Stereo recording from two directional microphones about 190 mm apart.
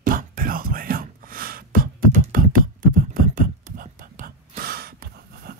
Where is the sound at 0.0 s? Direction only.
45° right (ahead or behind).